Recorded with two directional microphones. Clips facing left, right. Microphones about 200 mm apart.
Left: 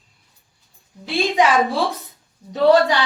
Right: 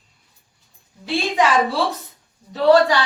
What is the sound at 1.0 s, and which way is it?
Speech, 15° left (ahead or behind).